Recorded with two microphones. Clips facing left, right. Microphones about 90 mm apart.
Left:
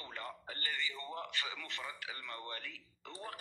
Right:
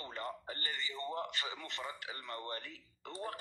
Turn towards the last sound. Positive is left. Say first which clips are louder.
# right 4 dB
turn(degrees=-35)  # may be behind; listen again after turning